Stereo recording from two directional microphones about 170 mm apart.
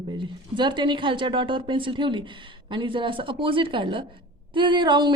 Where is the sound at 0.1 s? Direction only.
30° right (ahead or behind).